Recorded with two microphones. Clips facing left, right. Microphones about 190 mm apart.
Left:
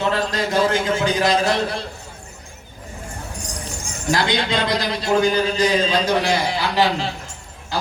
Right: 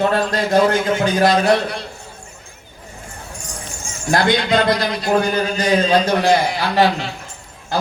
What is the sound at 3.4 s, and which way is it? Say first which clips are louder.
Clip-clop: left 1 dB; 35° left (ahead or behind).